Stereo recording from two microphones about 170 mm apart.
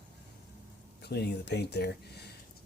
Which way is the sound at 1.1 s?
75° left (ahead or behind).